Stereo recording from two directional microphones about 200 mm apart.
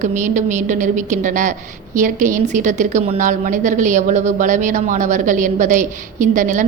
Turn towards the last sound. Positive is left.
turn(degrees=-40)  # may be behind; listen again after turning